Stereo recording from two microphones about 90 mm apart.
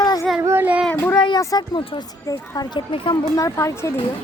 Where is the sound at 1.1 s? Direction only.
55° left (ahead or behind).